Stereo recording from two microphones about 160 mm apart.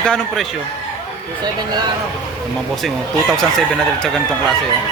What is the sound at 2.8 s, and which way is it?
Speech, centre (ahead or behind).